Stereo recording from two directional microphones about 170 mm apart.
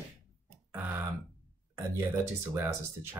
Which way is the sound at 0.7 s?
10° right (ahead or behind).